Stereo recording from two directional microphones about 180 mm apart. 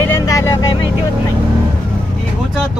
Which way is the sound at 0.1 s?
15° left (ahead or behind).